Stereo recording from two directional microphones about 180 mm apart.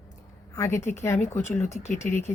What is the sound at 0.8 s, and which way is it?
Speech, 40° left (ahead or behind).